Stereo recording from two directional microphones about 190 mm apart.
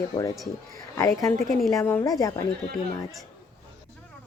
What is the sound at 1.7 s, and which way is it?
Speech, 10° left (ahead or behind).